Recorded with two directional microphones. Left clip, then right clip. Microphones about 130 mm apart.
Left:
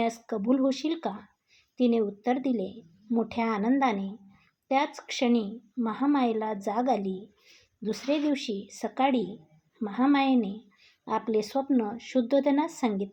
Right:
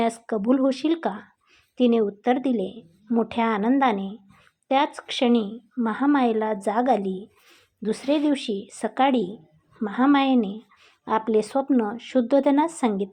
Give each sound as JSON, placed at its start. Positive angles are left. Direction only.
{"t": 0.0, "sound": "a woman's voice", "side_deg": -25}